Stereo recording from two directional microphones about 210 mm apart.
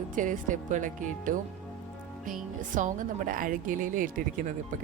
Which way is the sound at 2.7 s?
40° right (ahead or behind).